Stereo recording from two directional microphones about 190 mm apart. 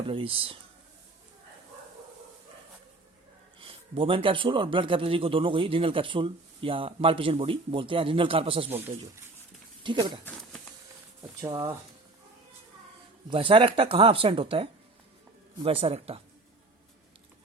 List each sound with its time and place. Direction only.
0.0 s a man's voice: 30° right (ahead or behind)
3.6 s a man's voice: 30° right (ahead or behind)
9.8 s a man's voice: 25° right (ahead or behind)
11.2 s speech: 20° right (ahead or behind)
13.3 s a man's voice: 30° right (ahead or behind)